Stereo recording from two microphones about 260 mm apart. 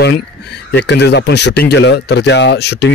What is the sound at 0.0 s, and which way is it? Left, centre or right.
Speech, left.